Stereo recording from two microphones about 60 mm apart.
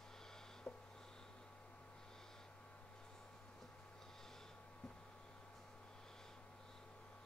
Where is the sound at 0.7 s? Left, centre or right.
Centre.